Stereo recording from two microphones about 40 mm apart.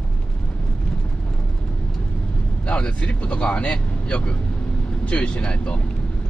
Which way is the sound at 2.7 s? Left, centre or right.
Left.